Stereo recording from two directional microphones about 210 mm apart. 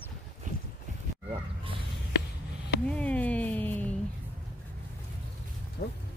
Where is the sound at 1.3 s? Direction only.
25° right (ahead or behind).